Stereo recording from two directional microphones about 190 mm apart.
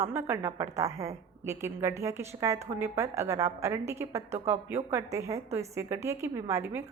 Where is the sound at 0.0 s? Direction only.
15° right (ahead or behind).